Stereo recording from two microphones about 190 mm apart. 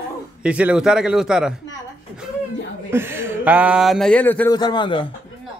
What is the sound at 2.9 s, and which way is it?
Speech, 10° right (ahead or behind).